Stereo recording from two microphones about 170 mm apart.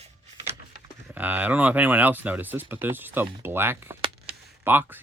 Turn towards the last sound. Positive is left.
turn(degrees=-10)  # may be behind; listen again after turning